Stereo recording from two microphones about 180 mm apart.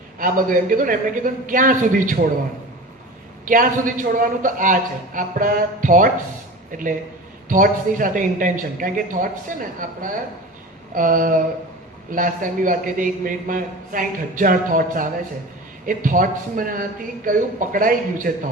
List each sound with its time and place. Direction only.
0.2 s a man's voice: 50° right (ahead or behind)
3.4 s a man's voice: 50° right (ahead or behind)